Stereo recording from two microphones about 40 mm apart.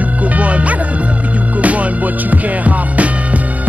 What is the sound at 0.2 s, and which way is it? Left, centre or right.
Music, right.